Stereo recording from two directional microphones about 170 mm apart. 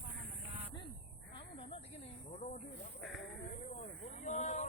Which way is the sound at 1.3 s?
35° left (ahead or behind).